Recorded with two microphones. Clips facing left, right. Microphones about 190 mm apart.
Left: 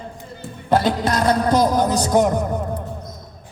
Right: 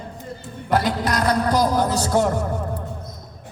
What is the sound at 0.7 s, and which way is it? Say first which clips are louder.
A man's voice: left 3 dB; 25° left (ahead or behind).